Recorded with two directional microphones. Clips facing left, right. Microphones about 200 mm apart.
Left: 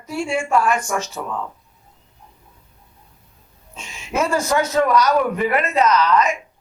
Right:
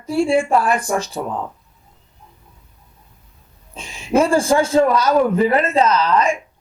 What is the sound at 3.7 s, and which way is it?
A man's voice, 35° right (ahead or behind).